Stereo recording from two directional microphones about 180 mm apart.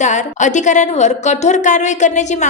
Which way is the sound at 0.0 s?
40° left (ahead or behind).